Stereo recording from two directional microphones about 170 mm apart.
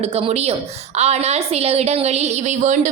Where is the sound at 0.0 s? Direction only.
35° right (ahead or behind).